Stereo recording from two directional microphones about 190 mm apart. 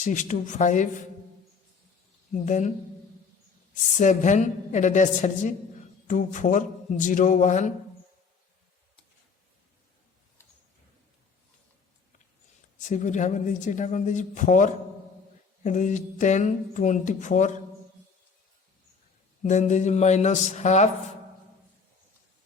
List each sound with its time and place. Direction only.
0.0 s speech: 40° left (ahead or behind)
2.3 s speech: 40° left (ahead or behind)
3.9 s speech: 40° left (ahead or behind)
12.8 s speech: 40° left (ahead or behind)
19.4 s speech: 40° left (ahead or behind)